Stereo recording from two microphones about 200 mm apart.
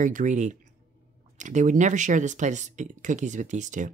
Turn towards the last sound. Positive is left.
turn(degrees=-40)  # may be behind; listen again after turning